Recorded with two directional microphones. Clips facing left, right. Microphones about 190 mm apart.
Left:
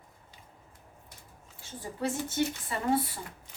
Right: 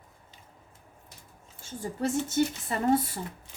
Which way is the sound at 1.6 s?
45° right (ahead or behind).